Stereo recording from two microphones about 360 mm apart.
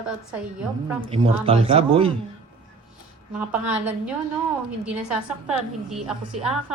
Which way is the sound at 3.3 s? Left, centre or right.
Centre.